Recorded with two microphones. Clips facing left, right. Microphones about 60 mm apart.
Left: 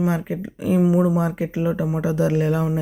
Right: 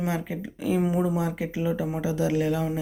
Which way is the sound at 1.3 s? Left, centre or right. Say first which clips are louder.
Left 4 dB; left.